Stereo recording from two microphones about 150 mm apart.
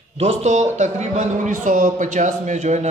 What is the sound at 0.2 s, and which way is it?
A man's voice, 45° right (ahead or behind).